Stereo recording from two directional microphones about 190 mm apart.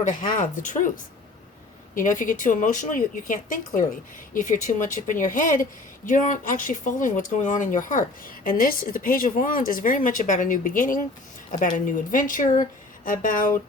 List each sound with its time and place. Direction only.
0.0 s speech: 40° left (ahead or behind)
2.0 s speech: 45° left (ahead or behind)